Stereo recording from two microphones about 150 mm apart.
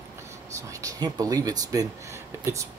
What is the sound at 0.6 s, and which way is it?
Speech, 20° right (ahead or behind).